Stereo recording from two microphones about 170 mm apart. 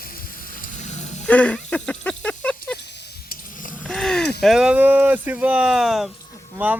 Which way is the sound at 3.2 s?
50° left (ahead or behind).